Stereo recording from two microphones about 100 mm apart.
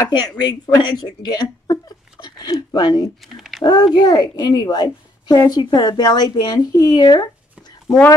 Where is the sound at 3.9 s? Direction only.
45° left (ahead or behind).